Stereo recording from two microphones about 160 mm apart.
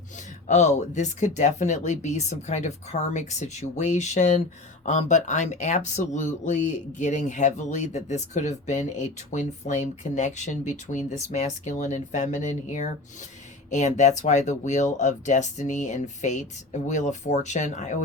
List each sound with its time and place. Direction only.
0.4 s speech: 45° left (ahead or behind)